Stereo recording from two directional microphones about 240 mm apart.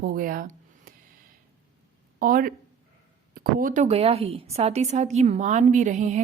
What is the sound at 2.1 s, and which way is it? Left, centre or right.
A woman's voice, right.